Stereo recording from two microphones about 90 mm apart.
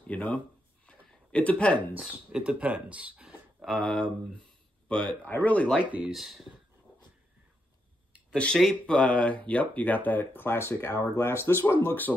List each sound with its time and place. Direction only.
0.0 s speech: 15° left (ahead or behind)
0.8 s a sound: 15° left (ahead or behind)
2.0 s speech: 10° right (ahead or behind)
3.6 s speech: 10° left (ahead or behind)
5.8 s speech: 15° right (ahead or behind)
6.1 s speech: centre (ahead or behind)
8.5 s speech: 5° left (ahead or behind)